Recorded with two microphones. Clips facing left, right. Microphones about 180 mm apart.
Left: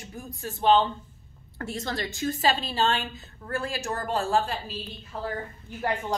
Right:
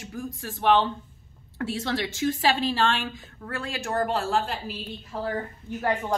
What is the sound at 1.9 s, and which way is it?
A woman's voice, 80° right.